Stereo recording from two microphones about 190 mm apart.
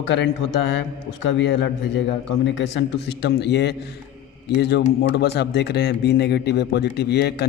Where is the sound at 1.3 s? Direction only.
70° left (ahead or behind).